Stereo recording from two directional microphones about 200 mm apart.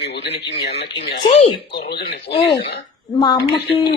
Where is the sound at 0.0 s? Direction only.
60° left (ahead or behind).